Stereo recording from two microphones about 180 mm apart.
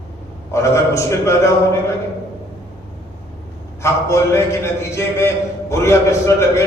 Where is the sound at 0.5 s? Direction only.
15° left (ahead or behind).